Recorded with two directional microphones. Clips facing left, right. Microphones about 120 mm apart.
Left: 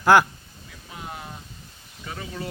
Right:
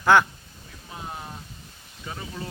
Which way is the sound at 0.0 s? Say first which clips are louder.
Left 2 dB; 5° left (ahead or behind).